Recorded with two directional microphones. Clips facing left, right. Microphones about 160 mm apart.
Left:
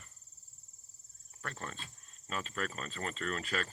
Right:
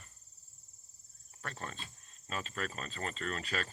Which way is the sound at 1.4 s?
35° right (ahead or behind).